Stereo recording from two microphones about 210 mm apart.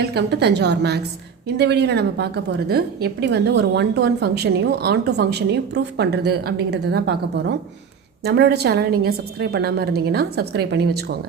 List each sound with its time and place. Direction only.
0.0 s a woman's voice: 50° right (ahead or behind)